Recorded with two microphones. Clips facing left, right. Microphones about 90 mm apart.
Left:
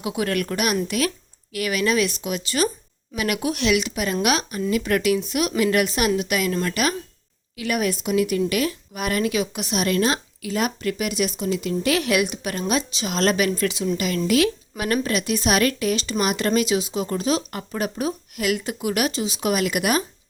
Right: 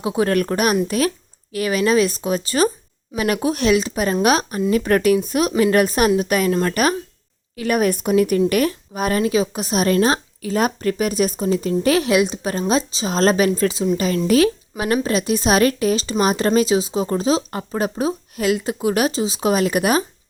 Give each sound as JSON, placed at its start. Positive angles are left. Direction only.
{"t": 0.0, "sound": "a woman's voice", "side_deg": -30}